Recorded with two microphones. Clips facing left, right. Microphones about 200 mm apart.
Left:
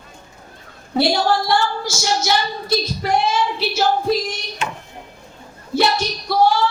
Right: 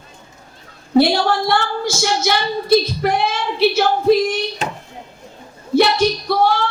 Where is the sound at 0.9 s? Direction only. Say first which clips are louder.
Right 3 dB; 55° right (ahead or behind).